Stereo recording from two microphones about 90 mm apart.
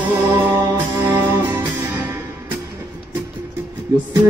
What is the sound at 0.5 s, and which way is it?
Music, 40° right (ahead or behind).